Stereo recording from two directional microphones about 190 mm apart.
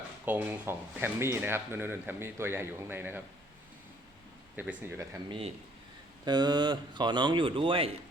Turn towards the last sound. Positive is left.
turn(degrees=-30)  # may be behind; listen again after turning